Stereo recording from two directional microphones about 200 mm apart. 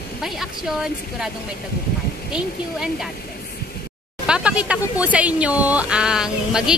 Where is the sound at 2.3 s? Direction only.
5° right (ahead or behind).